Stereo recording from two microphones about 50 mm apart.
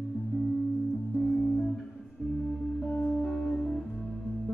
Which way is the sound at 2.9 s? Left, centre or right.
Left.